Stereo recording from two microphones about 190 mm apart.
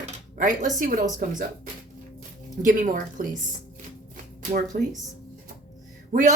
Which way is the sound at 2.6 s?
45° right (ahead or behind).